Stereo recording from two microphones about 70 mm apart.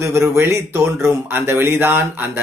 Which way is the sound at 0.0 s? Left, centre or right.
Right.